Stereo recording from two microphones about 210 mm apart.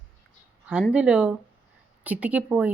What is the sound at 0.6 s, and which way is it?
A woman's voice, 5° right (ahead or behind).